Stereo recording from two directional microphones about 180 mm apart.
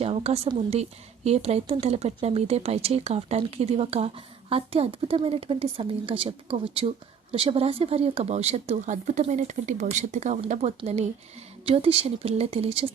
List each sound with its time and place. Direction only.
0.0 s speech: 35° right (ahead or behind)